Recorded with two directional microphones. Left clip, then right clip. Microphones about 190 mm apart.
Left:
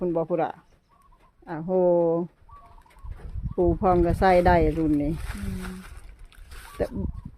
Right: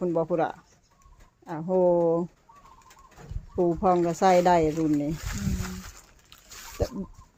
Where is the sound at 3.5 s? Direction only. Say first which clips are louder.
Left 1 dB; 15° left (ahead or behind).